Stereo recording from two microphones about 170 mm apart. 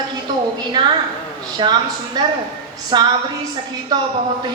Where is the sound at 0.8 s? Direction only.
25° right (ahead or behind).